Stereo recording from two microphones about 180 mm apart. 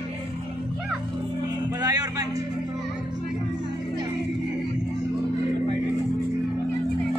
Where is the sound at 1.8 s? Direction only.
20° right (ahead or behind).